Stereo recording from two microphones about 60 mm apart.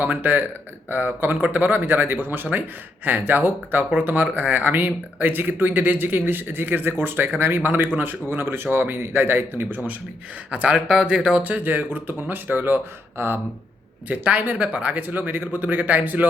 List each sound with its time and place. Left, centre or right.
0.0 s speech: right
10.5 s speech: centre
11.4 s speech: right
14.1 s speech: right